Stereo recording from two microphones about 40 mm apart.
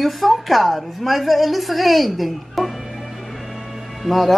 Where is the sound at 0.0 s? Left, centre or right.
Centre.